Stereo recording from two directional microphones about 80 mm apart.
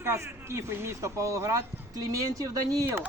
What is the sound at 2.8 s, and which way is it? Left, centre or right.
Speech, right.